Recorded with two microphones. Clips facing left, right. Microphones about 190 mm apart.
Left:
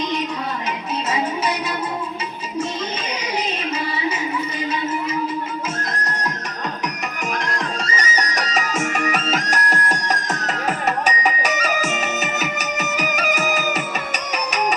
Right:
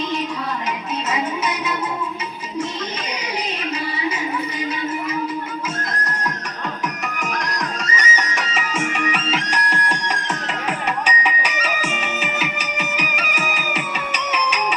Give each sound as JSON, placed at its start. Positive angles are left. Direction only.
{"t": 1.1, "sound": "music", "side_deg": 30}
{"t": 7.2, "sound": "music", "side_deg": 25}